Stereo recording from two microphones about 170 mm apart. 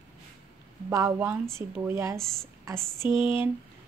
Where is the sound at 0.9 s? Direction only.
20° right (ahead or behind).